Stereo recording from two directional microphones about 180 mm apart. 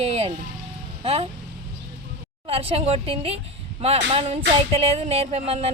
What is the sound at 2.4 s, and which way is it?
Speech, 30° right (ahead or behind).